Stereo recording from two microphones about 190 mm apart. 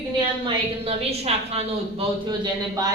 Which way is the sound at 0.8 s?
30° right (ahead or behind).